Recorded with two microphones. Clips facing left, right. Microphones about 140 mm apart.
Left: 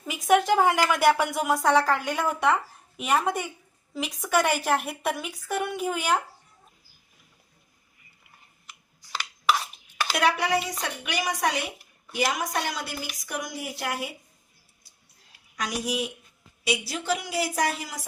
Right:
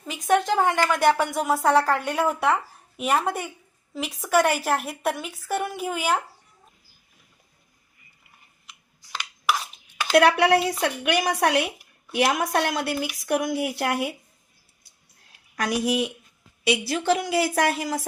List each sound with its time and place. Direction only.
0.0 s a woman's voice: 5° left (ahead or behind)
10.2 s a woman's voice: 65° right (ahead or behind)
15.5 s a woman's voice: 60° right (ahead or behind)